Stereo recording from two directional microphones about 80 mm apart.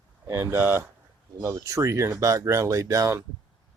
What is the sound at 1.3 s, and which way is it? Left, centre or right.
Speech, right.